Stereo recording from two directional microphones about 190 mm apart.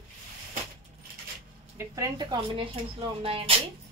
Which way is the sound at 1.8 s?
20° right (ahead or behind).